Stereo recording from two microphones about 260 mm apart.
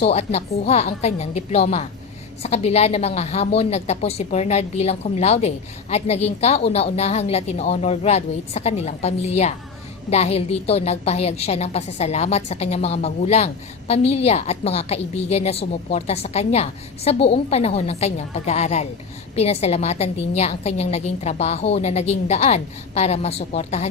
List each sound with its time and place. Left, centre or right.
0.0 s a woman's voice: left